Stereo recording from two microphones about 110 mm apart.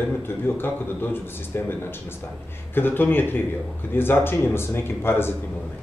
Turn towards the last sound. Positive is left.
turn(degrees=20)  # may be behind; listen again after turning